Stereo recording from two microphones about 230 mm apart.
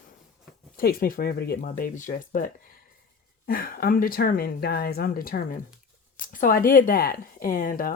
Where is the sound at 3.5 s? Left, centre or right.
Left.